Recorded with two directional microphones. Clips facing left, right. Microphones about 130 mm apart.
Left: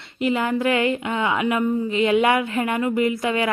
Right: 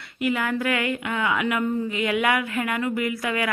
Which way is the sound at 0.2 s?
25° left (ahead or behind).